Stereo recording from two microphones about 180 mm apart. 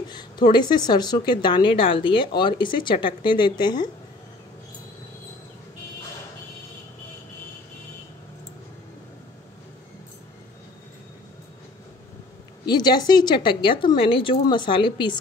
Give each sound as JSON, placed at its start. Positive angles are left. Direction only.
{"t": 0.1, "sound": "speech", "side_deg": 25}
{"t": 12.6, "sound": "speech", "side_deg": 25}